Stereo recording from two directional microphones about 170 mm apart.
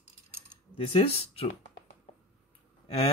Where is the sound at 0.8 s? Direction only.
35° left (ahead or behind).